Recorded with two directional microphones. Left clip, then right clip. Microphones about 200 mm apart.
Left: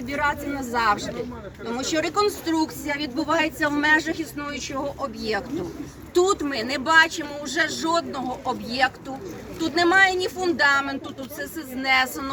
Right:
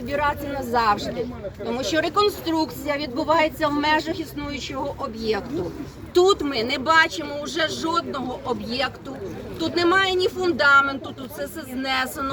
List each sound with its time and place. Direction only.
0.1 s speech: centre (ahead or behind); by 10.9 s 25° left (ahead or behind)